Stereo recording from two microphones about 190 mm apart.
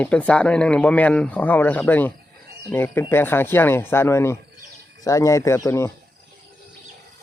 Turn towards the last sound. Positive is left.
turn(degrees=15)  # may be behind; listen again after turning